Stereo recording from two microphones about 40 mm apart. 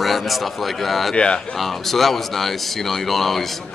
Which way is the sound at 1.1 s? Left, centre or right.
Left.